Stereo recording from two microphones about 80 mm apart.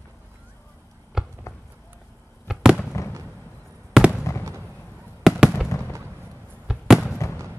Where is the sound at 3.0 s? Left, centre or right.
Left.